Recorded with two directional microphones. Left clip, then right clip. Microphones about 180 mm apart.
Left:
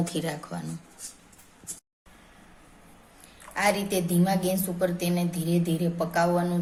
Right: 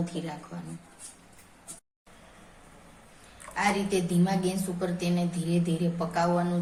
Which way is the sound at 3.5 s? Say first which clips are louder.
Left 2 dB; 60° left (ahead or behind).